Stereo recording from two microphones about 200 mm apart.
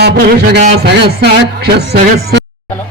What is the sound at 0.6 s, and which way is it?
Speech, 55° right (ahead or behind).